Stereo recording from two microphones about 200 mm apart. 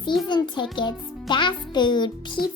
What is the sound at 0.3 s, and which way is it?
A child's voice, 25° left (ahead or behind).